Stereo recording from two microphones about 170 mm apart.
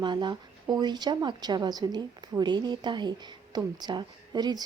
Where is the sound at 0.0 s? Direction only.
25° right (ahead or behind).